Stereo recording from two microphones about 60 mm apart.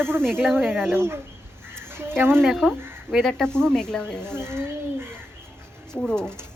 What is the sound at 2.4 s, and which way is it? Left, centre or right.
Speech, centre.